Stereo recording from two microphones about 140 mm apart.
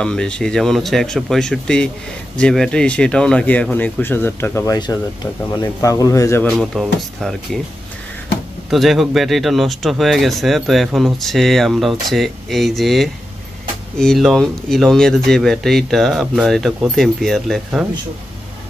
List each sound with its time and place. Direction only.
0.0 s a man's voice: 5° left (ahead or behind); by 6.4 s 25° left (ahead or behind)
6.6 s speech: centre (ahead or behind)
8.6 s speech: centre (ahead or behind)